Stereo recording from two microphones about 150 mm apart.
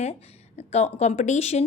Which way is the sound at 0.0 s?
45° left (ahead or behind).